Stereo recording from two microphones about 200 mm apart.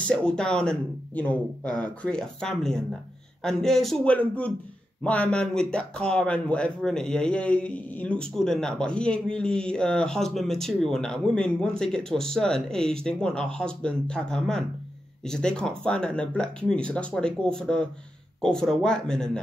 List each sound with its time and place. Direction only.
0.1 s speech: 5° left (ahead or behind)